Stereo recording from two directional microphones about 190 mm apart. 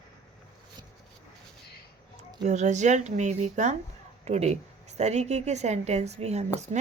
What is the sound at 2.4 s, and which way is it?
A woman's voice, 40° right (ahead or behind).